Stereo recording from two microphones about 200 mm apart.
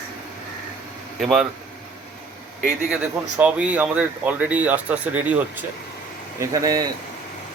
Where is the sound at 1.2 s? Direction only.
5° right (ahead or behind).